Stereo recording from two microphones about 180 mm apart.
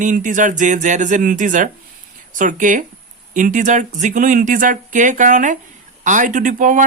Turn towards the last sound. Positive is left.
turn(degrees=-45)  # may be behind; listen again after turning